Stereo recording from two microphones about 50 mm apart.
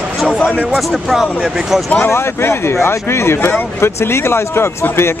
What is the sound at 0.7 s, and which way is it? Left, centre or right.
Speech, centre.